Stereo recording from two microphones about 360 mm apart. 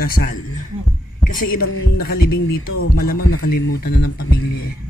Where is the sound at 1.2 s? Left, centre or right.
Left.